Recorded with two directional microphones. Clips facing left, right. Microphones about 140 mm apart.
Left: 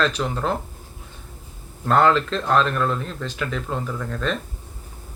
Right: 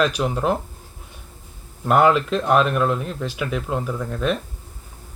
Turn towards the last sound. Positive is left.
turn(degrees=-10)  # may be behind; listen again after turning